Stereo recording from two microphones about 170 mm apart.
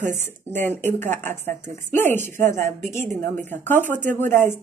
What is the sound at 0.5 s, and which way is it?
Speech, 10° left (ahead or behind).